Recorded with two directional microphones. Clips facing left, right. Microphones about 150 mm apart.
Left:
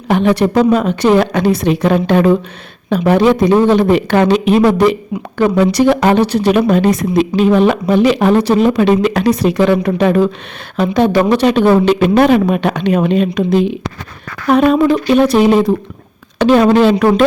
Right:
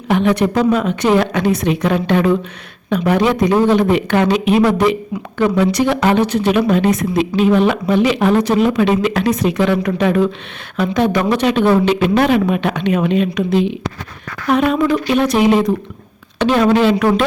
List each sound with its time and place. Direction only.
0.1 s speech: 35° left (ahead or behind)